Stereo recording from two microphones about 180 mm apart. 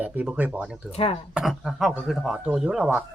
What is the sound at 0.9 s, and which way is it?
Speech, 35° left (ahead or behind).